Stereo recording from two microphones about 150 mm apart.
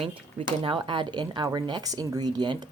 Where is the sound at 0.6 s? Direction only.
35° right (ahead or behind).